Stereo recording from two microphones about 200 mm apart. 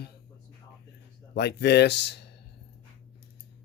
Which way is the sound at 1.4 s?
55° left (ahead or behind).